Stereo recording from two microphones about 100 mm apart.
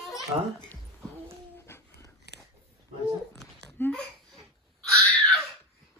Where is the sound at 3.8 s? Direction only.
20° left (ahead or behind).